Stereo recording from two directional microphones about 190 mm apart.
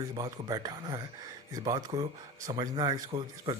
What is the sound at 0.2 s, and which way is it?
Speech, 20° right (ahead or behind).